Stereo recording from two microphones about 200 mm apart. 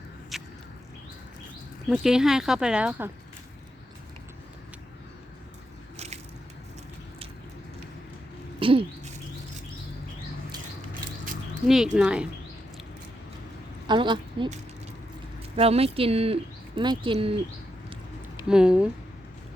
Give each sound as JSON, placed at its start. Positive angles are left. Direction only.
{"t": 0.3, "sound": "biting", "side_deg": 0}
{"t": 1.9, "sound": "speech", "side_deg": -5}
{"t": 8.5, "sound": "a sound", "side_deg": -25}
{"t": 11.6, "sound": "speech", "side_deg": 0}
{"t": 13.8, "sound": "a woman's voice", "side_deg": -25}
{"t": 15.5, "sound": "speech", "side_deg": -30}
{"t": 18.4, "sound": "speech", "side_deg": -5}